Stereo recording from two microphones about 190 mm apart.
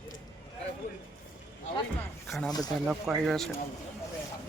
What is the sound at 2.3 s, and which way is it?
Speech, centre (ahead or behind).